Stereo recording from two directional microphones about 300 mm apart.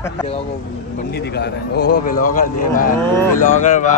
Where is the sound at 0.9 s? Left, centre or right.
Left.